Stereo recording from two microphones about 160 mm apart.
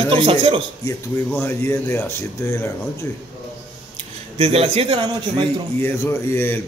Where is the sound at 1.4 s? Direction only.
15° left (ahead or behind).